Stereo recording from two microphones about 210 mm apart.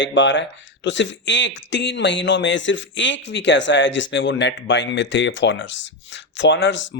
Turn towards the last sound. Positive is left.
turn(degrees=60)  # may be behind; listen again after turning